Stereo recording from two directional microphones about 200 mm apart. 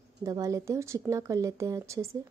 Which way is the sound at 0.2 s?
15° right (ahead or behind).